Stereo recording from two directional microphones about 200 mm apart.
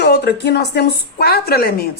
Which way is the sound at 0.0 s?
55° left (ahead or behind).